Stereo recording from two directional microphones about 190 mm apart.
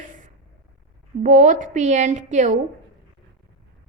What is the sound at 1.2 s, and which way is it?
A woman's voice, 40° right (ahead or behind).